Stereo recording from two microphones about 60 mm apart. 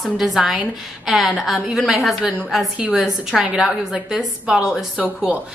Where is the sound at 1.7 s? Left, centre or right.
Centre.